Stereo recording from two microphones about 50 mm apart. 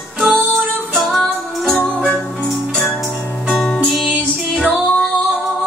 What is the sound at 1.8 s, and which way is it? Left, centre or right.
Music, centre.